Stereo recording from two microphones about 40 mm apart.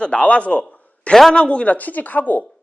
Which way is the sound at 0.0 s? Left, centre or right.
Left.